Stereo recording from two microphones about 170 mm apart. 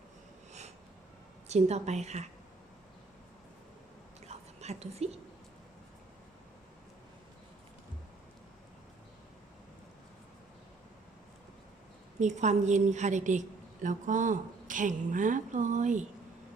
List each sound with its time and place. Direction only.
1.5 s a woman's voice: 40° right (ahead or behind)
4.3 s whispering: 40° right (ahead or behind)
12.2 s a woman's voice: 45° right (ahead or behind)